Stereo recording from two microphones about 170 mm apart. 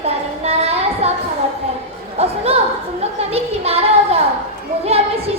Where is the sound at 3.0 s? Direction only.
35° right (ahead or behind).